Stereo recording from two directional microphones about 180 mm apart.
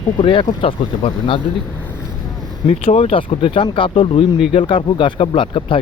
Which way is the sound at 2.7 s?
35° left (ahead or behind).